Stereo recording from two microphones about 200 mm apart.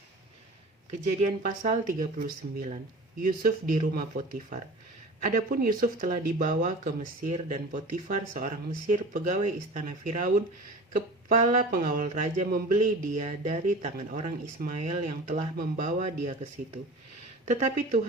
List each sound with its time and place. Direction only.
1.4 s speech: 40° right (ahead or behind)
5.2 s speech: 45° right (ahead or behind)